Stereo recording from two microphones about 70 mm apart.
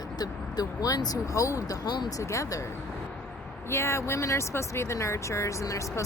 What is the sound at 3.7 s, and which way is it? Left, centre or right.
Speech, left.